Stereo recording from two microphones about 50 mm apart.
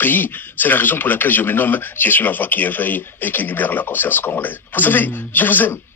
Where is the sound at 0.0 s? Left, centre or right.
Left.